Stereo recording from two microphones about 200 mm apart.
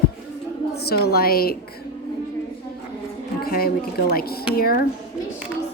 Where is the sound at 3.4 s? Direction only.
50° left (ahead or behind).